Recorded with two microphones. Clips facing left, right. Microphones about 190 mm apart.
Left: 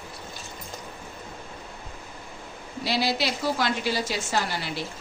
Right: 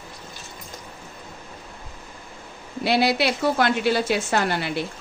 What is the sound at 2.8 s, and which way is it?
A woman's voice, 60° right (ahead or behind).